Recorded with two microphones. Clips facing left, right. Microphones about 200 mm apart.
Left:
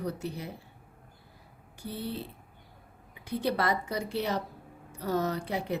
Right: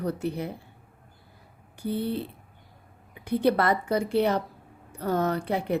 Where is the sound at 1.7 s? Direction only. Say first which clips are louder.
Right 8 dB; 55° right (ahead or behind).